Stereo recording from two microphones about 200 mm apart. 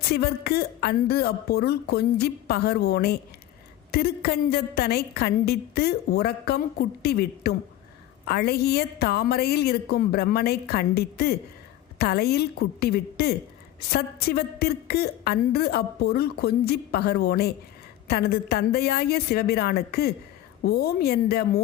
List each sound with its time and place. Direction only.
0.0 s a woman's voice: 50° left (ahead or behind)